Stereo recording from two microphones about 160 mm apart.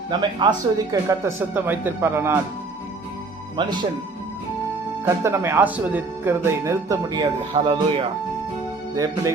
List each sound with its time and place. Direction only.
0.1 s speech: 30° right (ahead or behind)
3.6 s speech: 25° right (ahead or behind)
5.0 s speech: 15° right (ahead or behind); by 8.0 s 35° right (ahead or behind)